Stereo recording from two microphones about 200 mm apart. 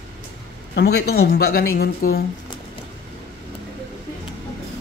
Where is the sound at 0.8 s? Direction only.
55° left (ahead or behind).